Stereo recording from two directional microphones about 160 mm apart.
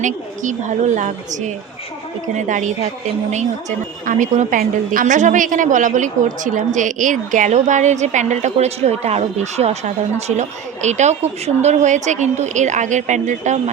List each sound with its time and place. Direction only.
0.0 s a woman's voice: 50° right (ahead or behind)